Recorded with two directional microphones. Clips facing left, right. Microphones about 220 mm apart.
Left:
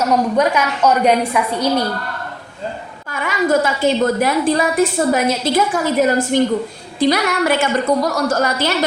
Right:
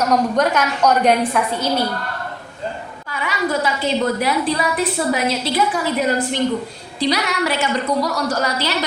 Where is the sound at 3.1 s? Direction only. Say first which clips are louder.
Left 5 dB; 50° left (ahead or behind).